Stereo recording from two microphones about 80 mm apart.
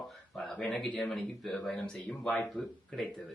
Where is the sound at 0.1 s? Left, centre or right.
Centre.